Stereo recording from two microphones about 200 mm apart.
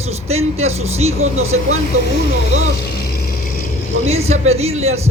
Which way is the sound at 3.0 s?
50° left (ahead or behind).